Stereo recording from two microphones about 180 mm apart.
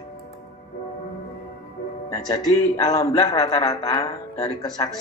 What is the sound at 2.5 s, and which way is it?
Speech, 20° left (ahead or behind).